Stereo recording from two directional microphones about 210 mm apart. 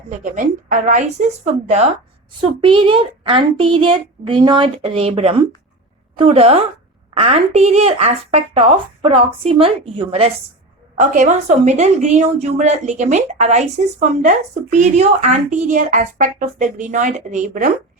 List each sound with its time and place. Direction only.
0.1 s a woman's voice: 35° right (ahead or behind)